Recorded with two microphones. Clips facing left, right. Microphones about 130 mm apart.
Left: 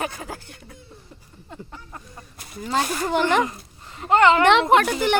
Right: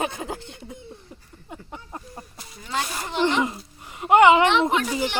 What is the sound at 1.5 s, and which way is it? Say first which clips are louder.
Speech: right 2 dB; 20° right (ahead or behind).